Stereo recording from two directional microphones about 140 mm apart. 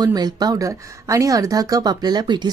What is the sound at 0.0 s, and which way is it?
Speech, 30° right (ahead or behind).